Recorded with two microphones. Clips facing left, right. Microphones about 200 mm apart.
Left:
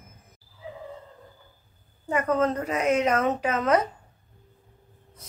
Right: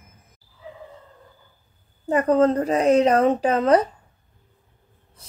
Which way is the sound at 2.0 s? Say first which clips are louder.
Right 6 dB; 35° right (ahead or behind).